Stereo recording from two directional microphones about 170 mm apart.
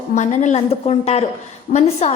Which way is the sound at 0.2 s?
40° left (ahead or behind).